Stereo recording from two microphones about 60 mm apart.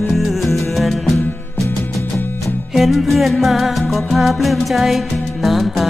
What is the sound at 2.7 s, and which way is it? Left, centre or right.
Salsa music, centre.